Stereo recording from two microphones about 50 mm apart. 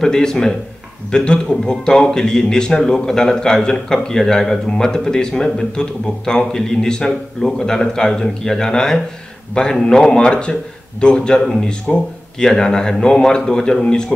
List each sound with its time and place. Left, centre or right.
0.0 s a man's voice: centre